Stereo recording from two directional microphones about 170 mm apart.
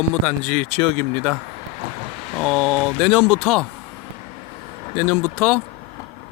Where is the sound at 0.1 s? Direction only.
5° left (ahead or behind).